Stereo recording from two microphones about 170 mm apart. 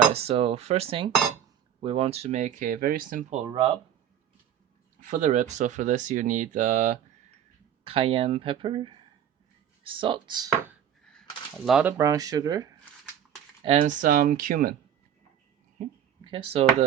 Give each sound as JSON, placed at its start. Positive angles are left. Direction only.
{"t": 0.1, "sound": "speech", "side_deg": -35}
{"t": 3.4, "sound": "speech", "side_deg": -25}
{"t": 5.0, "sound": "speech", "side_deg": -45}
{"t": 7.9, "sound": "speech", "side_deg": -35}
{"t": 11.1, "sound": "a sound", "side_deg": 5}
{"t": 11.9, "sound": "speech", "side_deg": -20}
{"t": 13.7, "sound": "speech", "side_deg": -45}
{"t": 15.8, "sound": "speech", "side_deg": -45}
{"t": 16.2, "sound": "speech", "side_deg": -30}